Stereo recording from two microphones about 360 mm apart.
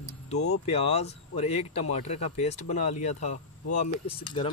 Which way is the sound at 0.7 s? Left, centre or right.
Centre.